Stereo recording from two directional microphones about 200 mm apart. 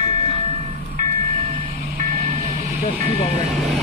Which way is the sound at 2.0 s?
35° right (ahead or behind).